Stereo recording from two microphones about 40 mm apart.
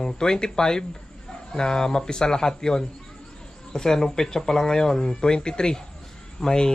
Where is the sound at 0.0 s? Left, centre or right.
Centre.